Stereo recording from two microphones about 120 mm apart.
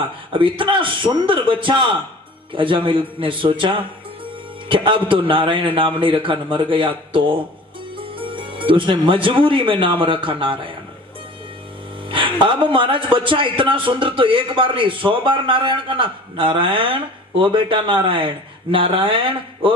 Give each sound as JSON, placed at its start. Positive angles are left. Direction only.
{"t": 0.3, "sound": "a man's voice", "side_deg": -45}
{"t": 12.1, "sound": "a man's voice", "side_deg": -45}